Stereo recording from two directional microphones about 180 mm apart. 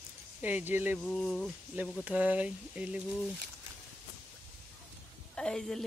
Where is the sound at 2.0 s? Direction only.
10° right (ahead or behind).